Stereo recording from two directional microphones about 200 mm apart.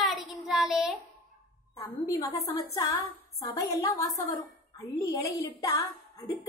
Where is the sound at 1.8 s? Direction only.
15° left (ahead or behind).